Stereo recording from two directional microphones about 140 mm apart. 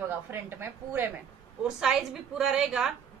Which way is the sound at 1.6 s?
5° right (ahead or behind).